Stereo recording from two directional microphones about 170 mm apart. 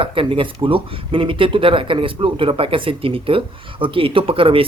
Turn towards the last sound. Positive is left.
turn(degrees=-30)  # may be behind; listen again after turning